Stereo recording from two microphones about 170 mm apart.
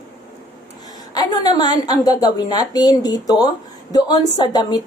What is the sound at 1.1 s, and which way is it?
A woman's voice, 25° left (ahead or behind).